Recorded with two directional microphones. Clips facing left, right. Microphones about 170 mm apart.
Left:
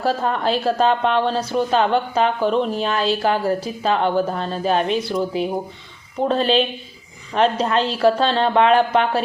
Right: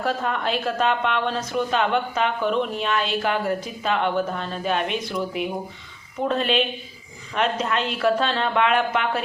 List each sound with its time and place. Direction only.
0.0 s speech: 35° left (ahead or behind)